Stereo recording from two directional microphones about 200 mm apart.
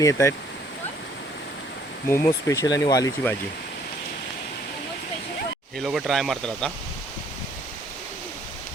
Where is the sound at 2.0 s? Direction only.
15° left (ahead or behind).